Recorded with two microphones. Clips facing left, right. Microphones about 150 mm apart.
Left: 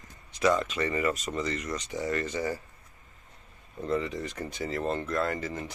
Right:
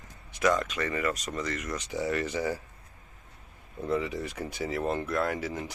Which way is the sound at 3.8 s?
10° right (ahead or behind).